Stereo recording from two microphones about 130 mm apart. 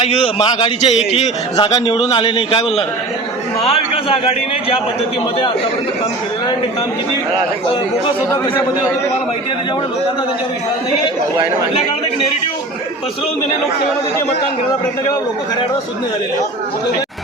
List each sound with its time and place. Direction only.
0.0 s a man's voice: 55° left (ahead or behind)
0.3 s a man's voice: 40° left (ahead or behind)
1.5 s a man's voice: 35° left (ahead or behind)